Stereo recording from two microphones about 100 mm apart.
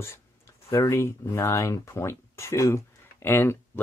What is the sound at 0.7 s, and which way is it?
Speech, 25° left (ahead or behind).